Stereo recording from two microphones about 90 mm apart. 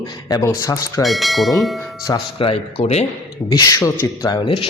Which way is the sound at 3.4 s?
65° left (ahead or behind).